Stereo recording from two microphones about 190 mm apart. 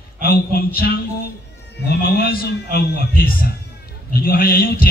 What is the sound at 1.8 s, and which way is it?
A man's voice, 55° left (ahead or behind).